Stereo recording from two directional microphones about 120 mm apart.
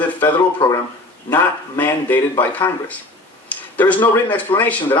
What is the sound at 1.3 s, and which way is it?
Speech, 20° left (ahead or behind).